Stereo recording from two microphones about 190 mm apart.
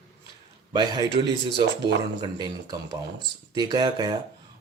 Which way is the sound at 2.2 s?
20° right (ahead or behind).